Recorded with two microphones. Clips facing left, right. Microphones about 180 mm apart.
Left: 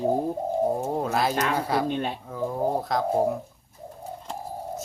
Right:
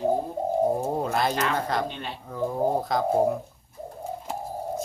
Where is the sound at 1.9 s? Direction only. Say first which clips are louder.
Left 8 dB; 50° left (ahead or behind).